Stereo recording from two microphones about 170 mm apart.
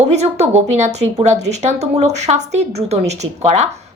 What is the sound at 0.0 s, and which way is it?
A woman's voice, 40° right (ahead or behind).